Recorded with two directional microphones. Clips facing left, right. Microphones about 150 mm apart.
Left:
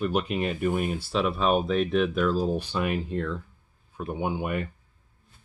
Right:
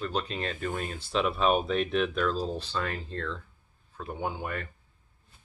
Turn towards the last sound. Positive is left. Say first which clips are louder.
# left 5 dB
turn(degrees=15)  # may be behind; listen again after turning